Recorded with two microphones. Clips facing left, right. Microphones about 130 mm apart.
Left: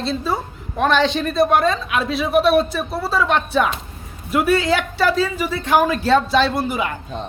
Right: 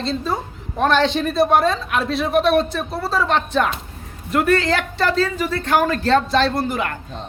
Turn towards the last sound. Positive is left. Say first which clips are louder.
# even
turn(degrees=10)  # may be behind; listen again after turning